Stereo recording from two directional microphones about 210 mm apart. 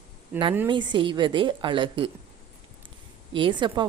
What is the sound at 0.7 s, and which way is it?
A woman's voice, 20° right (ahead or behind).